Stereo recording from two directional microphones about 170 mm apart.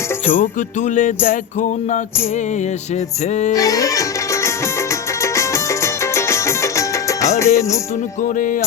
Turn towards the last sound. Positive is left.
turn(degrees=15)  # may be behind; listen again after turning